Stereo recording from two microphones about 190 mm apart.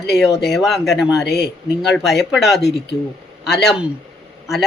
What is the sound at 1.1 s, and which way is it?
Speech, 60° left (ahead or behind).